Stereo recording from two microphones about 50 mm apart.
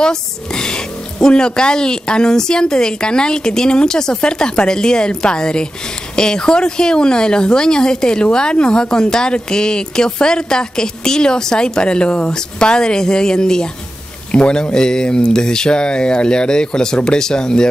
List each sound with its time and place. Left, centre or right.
0.0 s a woman's voice: centre